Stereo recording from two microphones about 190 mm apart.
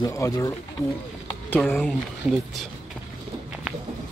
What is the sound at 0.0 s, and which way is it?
Speech, 15° left (ahead or behind).